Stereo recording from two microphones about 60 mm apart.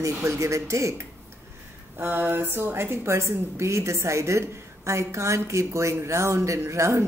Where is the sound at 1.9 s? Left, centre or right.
Right.